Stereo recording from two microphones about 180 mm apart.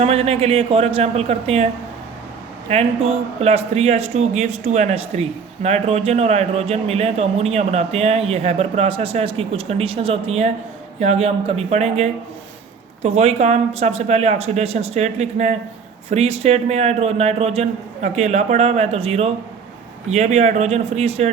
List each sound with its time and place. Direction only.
0.0 s a man's voice: 35° right (ahead or behind)